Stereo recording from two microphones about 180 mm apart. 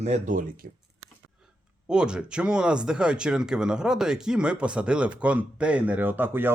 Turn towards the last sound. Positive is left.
turn(degrees=-10)  # may be behind; listen again after turning